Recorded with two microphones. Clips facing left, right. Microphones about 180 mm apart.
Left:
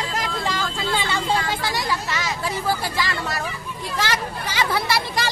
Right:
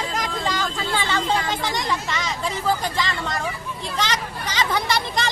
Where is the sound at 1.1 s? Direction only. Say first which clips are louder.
Even; 10° left (ahead or behind).